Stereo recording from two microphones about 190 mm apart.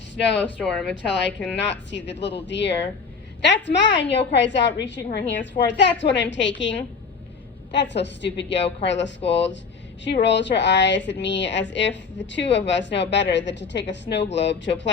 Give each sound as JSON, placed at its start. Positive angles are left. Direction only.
{"t": 0.3, "sound": "speech", "side_deg": 5}
{"t": 1.0, "sound": "a woman's voice", "side_deg": 70}